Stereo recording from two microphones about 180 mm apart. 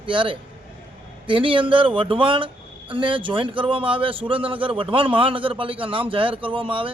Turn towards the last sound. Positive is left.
turn(degrees=-30)  # may be behind; listen again after turning